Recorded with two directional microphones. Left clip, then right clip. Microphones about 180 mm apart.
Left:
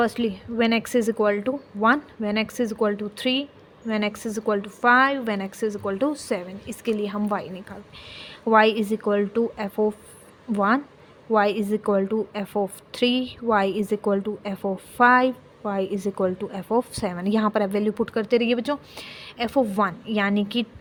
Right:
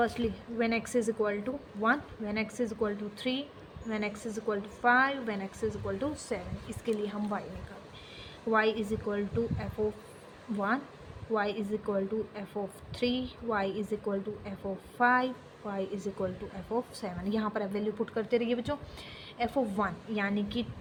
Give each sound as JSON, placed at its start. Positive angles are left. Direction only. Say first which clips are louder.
{"t": 0.0, "sound": "a woman's voice", "louder": "left 7 dB", "side_deg": 65}
{"t": 8.1, "sound": "a woman's voice", "louder": "left 10 dB", "side_deg": 70}
{"t": 11.3, "sound": "a woman's voice", "louder": "left 11 dB", "side_deg": 70}